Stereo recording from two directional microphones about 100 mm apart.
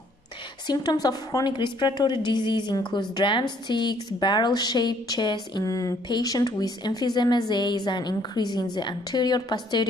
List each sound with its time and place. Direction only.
0.7 s a woman's voice: 40° left (ahead or behind)